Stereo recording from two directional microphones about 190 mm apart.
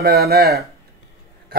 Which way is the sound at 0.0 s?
55° right (ahead or behind).